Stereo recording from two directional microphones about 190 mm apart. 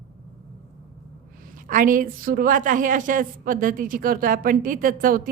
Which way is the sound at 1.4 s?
45° right (ahead or behind).